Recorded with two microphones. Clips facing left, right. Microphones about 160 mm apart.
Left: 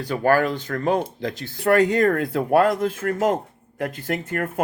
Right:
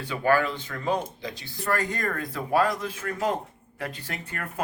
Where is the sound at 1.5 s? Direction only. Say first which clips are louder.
Left 11 dB; 70° left (ahead or behind).